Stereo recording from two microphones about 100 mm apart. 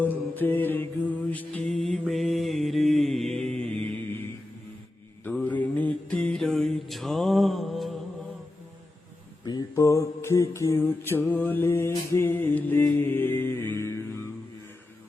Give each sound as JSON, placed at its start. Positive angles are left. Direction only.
{"t": 0.0, "sound": "mantra", "side_deg": 20}
{"t": 1.6, "sound": "mantra", "side_deg": 5}
{"t": 3.8, "sound": "mantra", "side_deg": 20}
{"t": 5.3, "sound": "music", "side_deg": 15}
{"t": 9.7, "sound": "mantra", "side_deg": 30}